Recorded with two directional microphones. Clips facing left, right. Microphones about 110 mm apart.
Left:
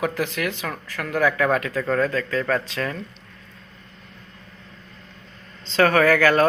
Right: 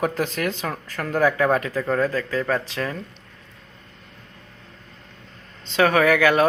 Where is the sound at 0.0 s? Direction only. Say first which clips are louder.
Right 1 dB; 35° right (ahead or behind).